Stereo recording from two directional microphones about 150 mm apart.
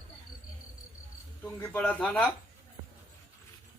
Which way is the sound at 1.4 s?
10° left (ahead or behind).